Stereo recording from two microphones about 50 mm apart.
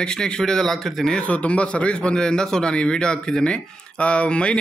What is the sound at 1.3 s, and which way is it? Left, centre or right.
A man's voice, left.